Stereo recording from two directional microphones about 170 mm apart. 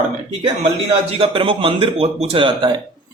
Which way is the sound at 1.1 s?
30° right (ahead or behind).